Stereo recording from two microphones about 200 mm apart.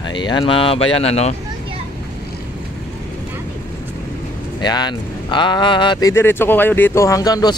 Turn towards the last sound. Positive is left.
turn(degrees=20)  # may be behind; listen again after turning